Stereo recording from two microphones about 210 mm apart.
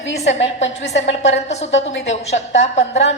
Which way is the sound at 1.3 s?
30° left (ahead or behind).